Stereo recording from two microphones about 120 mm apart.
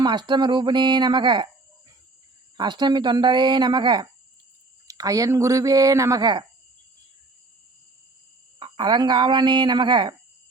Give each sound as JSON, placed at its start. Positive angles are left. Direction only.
{"t": 0.0, "sound": "speech", "side_deg": -35}
{"t": 2.6, "sound": "speech", "side_deg": -35}
{"t": 8.5, "sound": "speech", "side_deg": -40}